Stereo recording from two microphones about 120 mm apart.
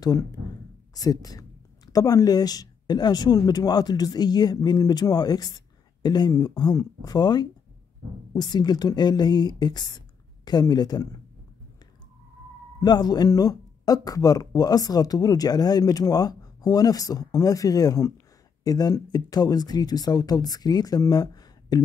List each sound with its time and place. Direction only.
0.0 s speech: 30° left (ahead or behind)
12.8 s speech: 35° left (ahead or behind)